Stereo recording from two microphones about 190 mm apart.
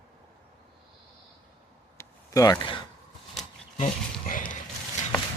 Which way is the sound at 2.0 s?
15° left (ahead or behind).